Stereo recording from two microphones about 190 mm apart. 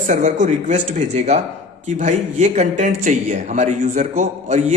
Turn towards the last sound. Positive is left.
turn(degrees=-40)  # may be behind; listen again after turning